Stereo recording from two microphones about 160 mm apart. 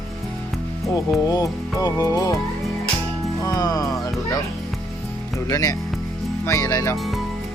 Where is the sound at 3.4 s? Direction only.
20° left (ahead or behind).